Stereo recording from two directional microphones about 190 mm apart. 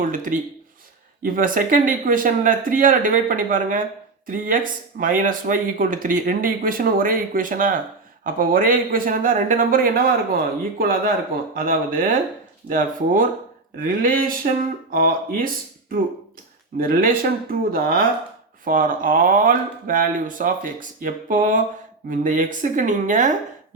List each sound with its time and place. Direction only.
0.0 s speech: 45° right (ahead or behind)